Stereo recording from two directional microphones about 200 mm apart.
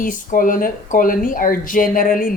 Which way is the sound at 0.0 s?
40° left (ahead or behind).